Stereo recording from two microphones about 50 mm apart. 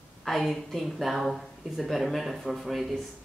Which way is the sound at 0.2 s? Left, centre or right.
Centre.